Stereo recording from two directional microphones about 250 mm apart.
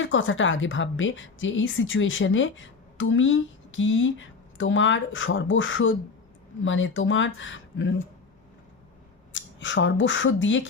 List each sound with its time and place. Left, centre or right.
0.0 s a woman's voice: left
9.3 s speech: left